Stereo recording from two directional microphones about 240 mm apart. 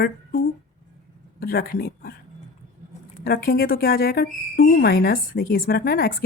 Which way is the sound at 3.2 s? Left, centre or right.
Left.